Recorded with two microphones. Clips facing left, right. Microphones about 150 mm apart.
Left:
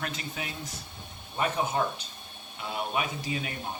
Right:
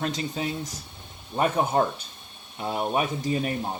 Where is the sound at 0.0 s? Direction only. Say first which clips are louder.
Right 8 dB; 30° right (ahead or behind).